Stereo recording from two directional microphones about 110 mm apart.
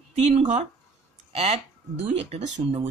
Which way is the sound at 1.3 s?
80° right.